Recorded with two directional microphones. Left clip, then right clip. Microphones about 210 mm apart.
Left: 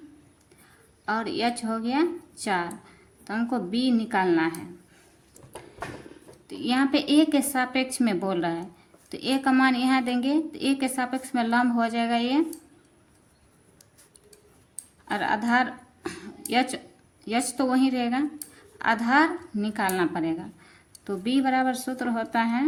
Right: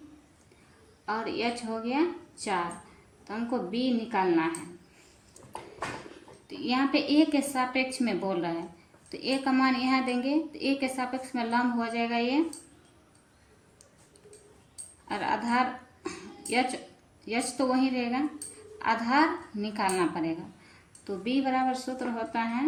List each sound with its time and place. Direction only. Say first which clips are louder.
1.0 s a woman's voice: left 4 dB; 50° left (ahead or behind)
6.7 s a woman's voice: left 3 dB; 45° left (ahead or behind)
15.0 s a woman's voice: left 4 dB; 45° left (ahead or behind)